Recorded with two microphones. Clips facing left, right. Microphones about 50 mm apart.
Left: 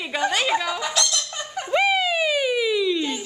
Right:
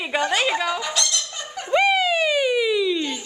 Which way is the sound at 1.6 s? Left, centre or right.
Centre.